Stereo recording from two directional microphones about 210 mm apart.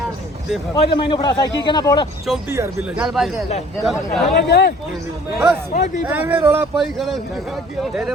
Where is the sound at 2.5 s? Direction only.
10° right (ahead or behind).